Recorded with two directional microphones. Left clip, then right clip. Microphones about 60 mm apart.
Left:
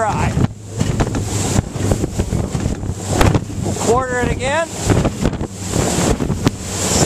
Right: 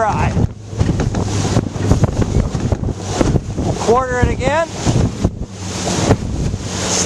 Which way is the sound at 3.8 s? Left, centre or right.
Right.